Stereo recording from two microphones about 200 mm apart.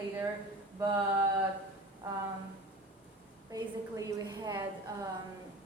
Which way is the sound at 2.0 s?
10° right (ahead or behind).